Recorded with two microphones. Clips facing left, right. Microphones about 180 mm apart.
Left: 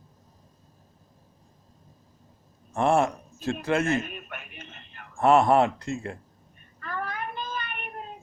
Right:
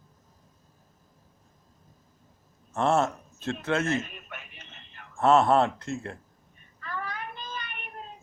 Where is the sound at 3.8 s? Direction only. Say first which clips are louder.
Left 2 dB; 55° left (ahead or behind).